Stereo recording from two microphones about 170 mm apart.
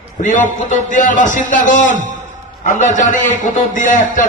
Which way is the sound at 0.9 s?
50° left (ahead or behind).